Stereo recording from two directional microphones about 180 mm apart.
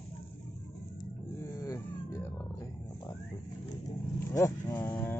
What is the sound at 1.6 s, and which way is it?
Cat, 15° left (ahead or behind).